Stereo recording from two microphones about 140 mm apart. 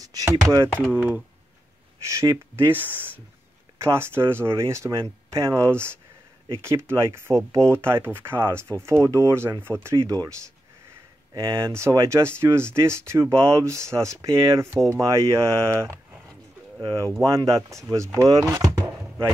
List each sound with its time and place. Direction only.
0.0 s speech: 25° right (ahead or behind)
0.9 s speech: 10° right (ahead or behind)
2.0 s speech: 20° right (ahead or behind)
11.3 s speech: 20° right (ahead or behind)
17.2 s speech: 20° right (ahead or behind)